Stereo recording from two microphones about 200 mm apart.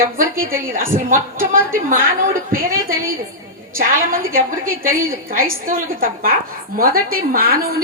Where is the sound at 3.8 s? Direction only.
45° right (ahead or behind).